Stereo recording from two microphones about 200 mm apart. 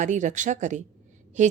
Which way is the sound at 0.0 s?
40° right (ahead or behind).